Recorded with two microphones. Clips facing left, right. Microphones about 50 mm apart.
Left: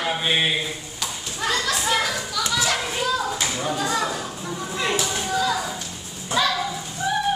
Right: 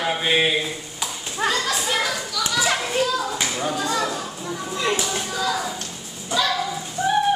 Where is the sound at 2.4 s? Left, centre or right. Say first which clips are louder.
Right 1 dB; centre.